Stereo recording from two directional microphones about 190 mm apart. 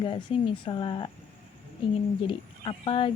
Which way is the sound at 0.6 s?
25° left (ahead or behind).